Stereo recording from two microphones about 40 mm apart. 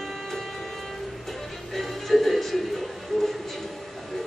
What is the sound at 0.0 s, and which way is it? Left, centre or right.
Music, centre.